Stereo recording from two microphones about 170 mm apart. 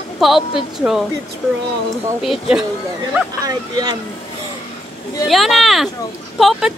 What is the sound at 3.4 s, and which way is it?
Speech, 25° right (ahead or behind).